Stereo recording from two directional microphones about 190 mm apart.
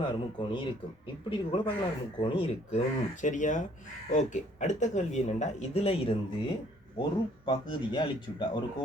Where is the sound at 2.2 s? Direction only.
30° left (ahead or behind).